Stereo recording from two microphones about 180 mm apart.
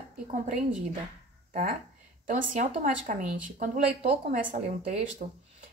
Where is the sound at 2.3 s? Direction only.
45° right (ahead or behind).